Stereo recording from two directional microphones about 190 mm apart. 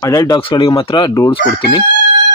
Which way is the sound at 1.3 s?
55° left (ahead or behind).